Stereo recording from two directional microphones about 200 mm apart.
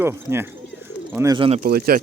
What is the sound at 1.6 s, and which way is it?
Speech, 50° right (ahead or behind).